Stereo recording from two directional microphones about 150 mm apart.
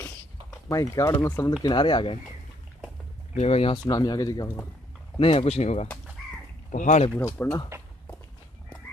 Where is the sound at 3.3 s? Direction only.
45° left (ahead or behind).